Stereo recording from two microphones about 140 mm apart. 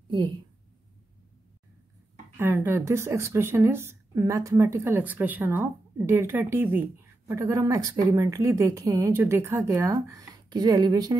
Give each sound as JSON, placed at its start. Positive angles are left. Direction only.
{"t": 2.3, "sound": "speech", "side_deg": -15}